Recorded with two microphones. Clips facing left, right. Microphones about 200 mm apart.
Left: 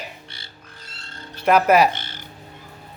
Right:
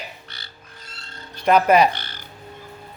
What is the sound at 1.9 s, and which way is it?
Music, 25° left (ahead or behind).